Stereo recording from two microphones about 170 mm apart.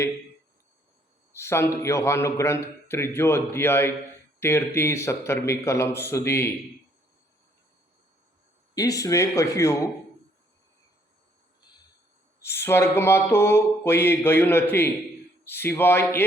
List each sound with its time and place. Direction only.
1.4 s a man's voice: 15° left (ahead or behind)
8.7 s a man's voice: 20° left (ahead or behind)
12.4 s a man's voice: 15° left (ahead or behind)